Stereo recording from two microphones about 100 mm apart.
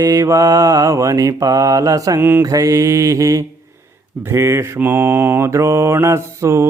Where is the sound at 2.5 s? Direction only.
35° right (ahead or behind).